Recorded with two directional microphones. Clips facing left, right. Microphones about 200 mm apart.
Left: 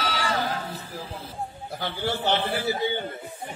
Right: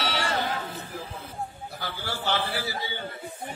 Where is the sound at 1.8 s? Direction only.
20° left (ahead or behind).